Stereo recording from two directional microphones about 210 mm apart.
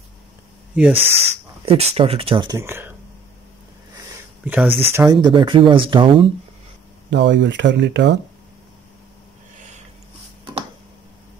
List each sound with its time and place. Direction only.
0.9 s speech: 30° right (ahead or behind); by 2.9 s 10° right (ahead or behind)
4.5 s speech: 10° right (ahead or behind); by 6.3 s 25° right (ahead or behind)
7.1 s speech: 60° right (ahead or behind)